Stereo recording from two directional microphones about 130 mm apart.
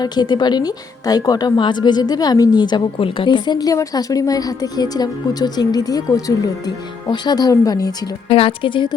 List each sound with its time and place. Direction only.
0.0 s a woman's voice: 35° left (ahead or behind)
8.3 s a woman's voice: 45° left (ahead or behind)